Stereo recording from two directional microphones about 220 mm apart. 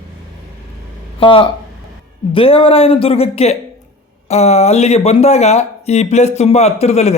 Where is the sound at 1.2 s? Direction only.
25° left (ahead or behind).